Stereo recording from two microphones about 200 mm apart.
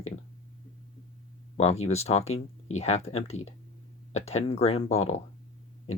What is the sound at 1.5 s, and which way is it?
Speech, 30° left (ahead or behind).